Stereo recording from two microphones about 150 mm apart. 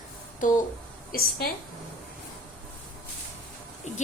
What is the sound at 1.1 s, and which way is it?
Speech, 90° left.